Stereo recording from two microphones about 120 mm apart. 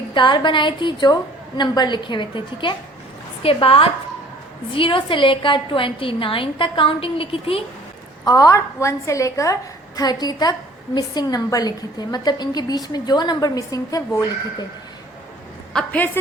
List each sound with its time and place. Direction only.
0.1 s a woman's voice: 40° left (ahead or behind)
8.2 s a woman's voice: 30° left (ahead or behind)
15.7 s a woman's voice: 10° left (ahead or behind)